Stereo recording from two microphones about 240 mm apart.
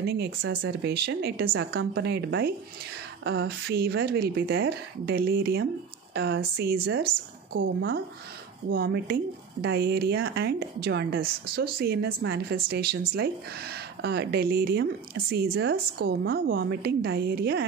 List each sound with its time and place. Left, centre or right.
0.0 s a woman's voice: right